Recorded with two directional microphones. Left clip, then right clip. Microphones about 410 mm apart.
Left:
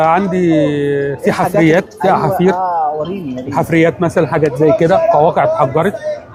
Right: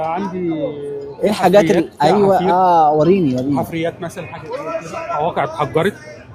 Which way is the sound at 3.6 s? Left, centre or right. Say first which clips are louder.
Left 9 dB; left.